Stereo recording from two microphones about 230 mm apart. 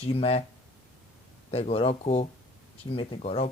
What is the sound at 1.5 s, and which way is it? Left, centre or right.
Speech, left.